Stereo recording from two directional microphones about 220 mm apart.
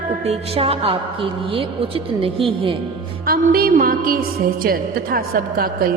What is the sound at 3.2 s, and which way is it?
A woman's voice, 40° right (ahead or behind).